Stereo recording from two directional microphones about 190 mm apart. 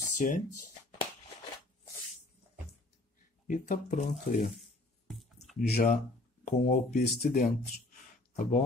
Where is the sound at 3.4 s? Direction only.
45° left (ahead or behind).